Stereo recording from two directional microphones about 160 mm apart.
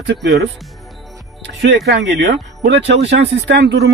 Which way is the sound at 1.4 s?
90° right.